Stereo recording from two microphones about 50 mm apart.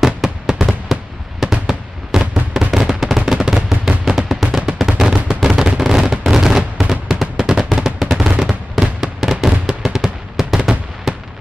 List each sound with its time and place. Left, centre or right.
0.0 s fireworks: centre
2.7 s fireworks: centre
4.3 s a sound: centre
8.0 s fireworks: centre